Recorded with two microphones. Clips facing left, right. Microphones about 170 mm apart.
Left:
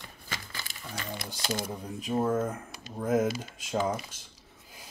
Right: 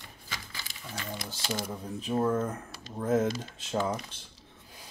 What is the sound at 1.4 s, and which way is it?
Speech, 50° left (ahead or behind).